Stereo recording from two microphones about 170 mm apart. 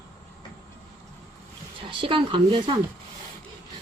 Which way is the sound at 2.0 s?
30° right (ahead or behind).